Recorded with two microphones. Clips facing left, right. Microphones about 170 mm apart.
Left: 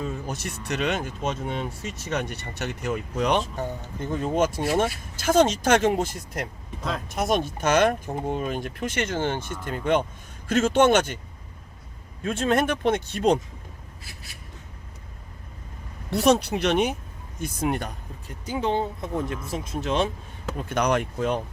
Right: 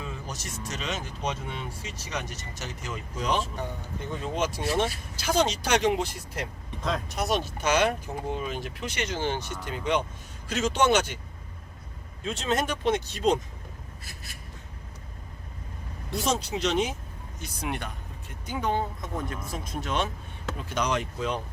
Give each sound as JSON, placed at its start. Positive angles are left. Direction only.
{"t": 0.0, "sound": "speech", "side_deg": 60}
{"t": 4.0, "sound": "speech", "side_deg": 50}
{"t": 12.2, "sound": "speech", "side_deg": 55}
{"t": 16.1, "sound": "speech", "side_deg": 65}
{"t": 17.4, "sound": "speech", "side_deg": 45}
{"t": 18.6, "sound": "speech", "side_deg": 25}
{"t": 20.6, "sound": "speech", "side_deg": 55}